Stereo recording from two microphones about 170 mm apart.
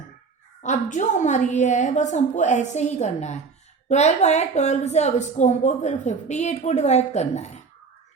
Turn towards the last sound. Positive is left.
turn(degrees=40)  # may be behind; listen again after turning